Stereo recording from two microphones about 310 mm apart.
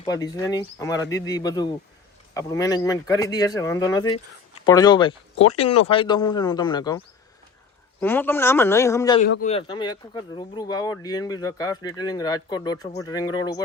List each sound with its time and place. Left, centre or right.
0.0 s speech: centre
5.6 s speech: left
5.9 s speech: centre
8.0 s speech: centre
9.2 s speech: left